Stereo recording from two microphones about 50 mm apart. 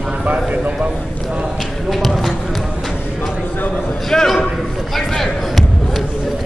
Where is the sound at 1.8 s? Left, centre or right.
Centre.